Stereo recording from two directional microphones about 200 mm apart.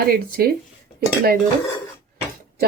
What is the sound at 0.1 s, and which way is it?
Speech, 50° right (ahead or behind).